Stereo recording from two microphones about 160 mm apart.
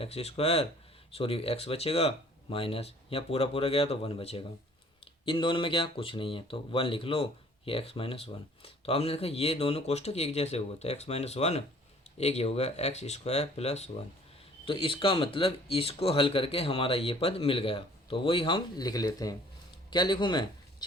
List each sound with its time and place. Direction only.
0.0 s speech: 40° left (ahead or behind)